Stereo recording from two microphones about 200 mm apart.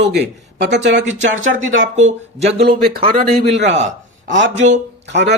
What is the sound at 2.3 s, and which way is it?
Speech, 35° right (ahead or behind).